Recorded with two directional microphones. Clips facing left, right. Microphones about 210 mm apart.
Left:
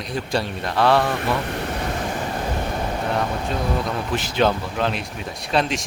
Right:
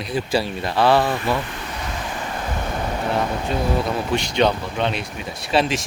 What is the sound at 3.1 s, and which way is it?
Speech, centre (ahead or behind).